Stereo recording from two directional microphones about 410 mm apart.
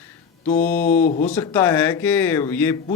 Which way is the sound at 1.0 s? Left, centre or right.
Centre.